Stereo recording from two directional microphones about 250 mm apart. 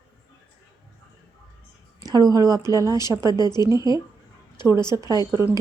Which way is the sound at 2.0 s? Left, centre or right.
Centre.